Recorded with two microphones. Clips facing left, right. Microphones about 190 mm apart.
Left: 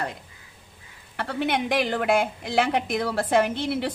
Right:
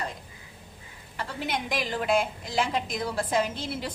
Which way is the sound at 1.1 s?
60° left (ahead or behind).